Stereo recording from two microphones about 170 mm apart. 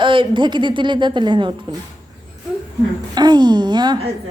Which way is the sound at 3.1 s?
25° right (ahead or behind).